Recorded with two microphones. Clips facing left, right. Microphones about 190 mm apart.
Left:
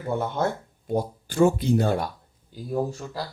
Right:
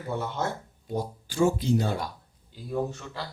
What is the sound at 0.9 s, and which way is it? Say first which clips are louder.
Speech: left 5 dB; 55° left (ahead or behind).